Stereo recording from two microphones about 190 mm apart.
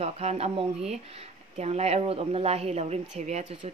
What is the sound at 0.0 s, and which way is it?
A woman's voice, 35° right (ahead or behind).